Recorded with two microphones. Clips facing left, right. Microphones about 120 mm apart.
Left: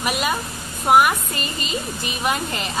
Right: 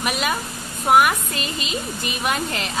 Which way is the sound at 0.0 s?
Centre (ahead or behind).